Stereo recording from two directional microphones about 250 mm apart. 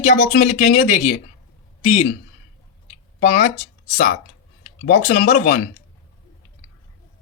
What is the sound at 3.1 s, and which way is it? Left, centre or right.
Speech, left.